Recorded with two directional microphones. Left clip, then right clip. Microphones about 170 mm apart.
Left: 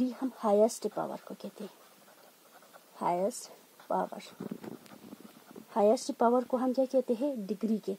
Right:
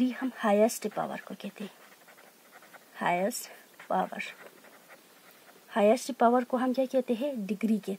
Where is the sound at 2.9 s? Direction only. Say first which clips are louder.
Right 2 dB; 20° left (ahead or behind).